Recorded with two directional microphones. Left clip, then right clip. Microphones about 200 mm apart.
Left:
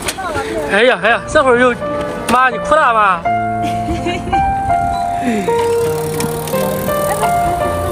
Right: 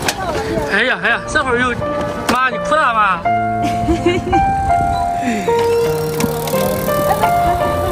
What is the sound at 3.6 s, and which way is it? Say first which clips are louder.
Music: right 2 dB; 50° right (ahead or behind).